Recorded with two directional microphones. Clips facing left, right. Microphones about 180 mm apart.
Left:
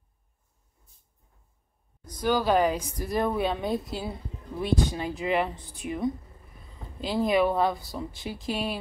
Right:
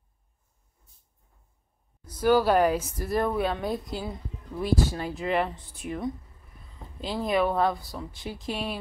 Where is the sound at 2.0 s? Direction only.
10° right (ahead or behind).